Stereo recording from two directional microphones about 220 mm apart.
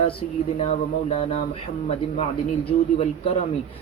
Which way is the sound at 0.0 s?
25° left (ahead or behind).